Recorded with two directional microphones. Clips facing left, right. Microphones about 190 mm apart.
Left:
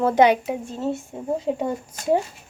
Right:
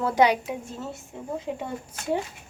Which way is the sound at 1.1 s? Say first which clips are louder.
Left 4 dB; 40° left (ahead or behind).